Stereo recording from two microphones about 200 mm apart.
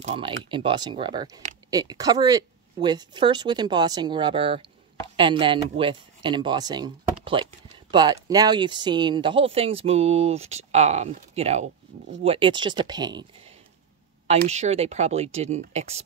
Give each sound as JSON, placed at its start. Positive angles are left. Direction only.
{"t": 0.0, "sound": "speech", "side_deg": -30}
{"t": 14.5, "sound": "speech", "side_deg": -30}